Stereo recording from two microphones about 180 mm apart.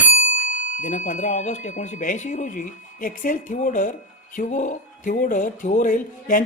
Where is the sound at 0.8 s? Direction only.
45° left (ahead or behind).